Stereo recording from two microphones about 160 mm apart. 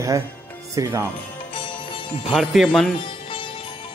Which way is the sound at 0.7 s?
20° right (ahead or behind).